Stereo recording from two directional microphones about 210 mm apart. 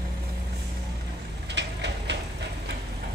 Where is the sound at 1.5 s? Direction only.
55° right (ahead or behind).